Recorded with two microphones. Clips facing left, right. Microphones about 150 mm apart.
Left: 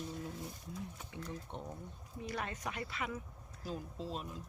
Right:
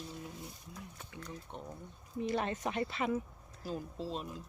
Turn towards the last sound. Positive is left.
turn(degrees=0)  # may be behind; listen again after turning